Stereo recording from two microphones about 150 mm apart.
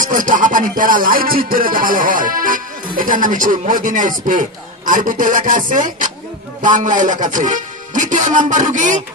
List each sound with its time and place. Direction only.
0.0 s a man's voice: 65° right (ahead or behind)